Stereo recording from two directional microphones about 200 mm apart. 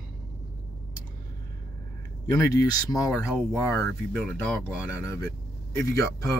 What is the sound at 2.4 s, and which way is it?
Speech, 15° left (ahead or behind).